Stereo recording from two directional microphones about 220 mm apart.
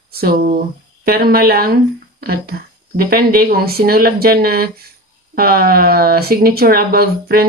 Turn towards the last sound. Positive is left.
turn(degrees=-45)  # may be behind; listen again after turning